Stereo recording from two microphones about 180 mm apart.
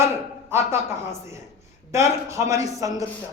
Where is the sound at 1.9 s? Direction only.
15° right (ahead or behind).